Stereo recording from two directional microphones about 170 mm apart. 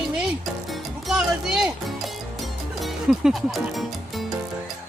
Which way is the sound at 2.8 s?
Centre (ahead or behind).